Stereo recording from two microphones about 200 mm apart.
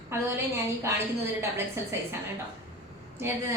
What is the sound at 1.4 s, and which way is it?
Speech, 10° right (ahead or behind).